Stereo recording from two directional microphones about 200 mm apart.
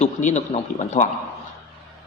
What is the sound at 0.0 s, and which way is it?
Speech, 35° left (ahead or behind).